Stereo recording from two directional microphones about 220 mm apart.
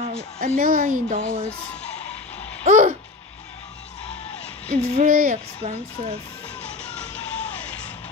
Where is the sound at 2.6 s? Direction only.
35° right (ahead or behind).